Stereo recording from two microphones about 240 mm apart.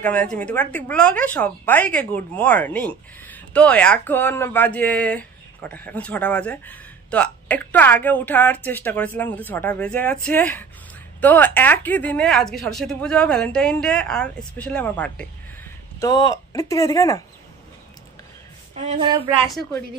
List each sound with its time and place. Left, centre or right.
0.0 s a woman's voice: centre
16.0 s a woman's voice: centre
18.8 s speech: right
19.4 s speech: centre